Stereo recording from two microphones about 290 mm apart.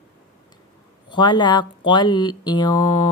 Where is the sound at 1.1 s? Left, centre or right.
Centre.